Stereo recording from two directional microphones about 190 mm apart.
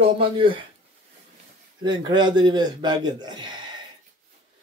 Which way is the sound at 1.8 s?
25° right (ahead or behind).